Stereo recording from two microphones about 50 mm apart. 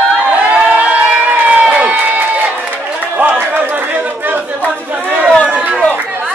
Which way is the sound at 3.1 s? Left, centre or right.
Right.